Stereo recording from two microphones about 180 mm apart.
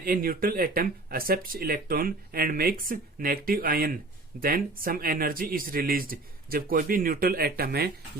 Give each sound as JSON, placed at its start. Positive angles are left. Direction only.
{"t": 0.0, "sound": "speech", "side_deg": -55}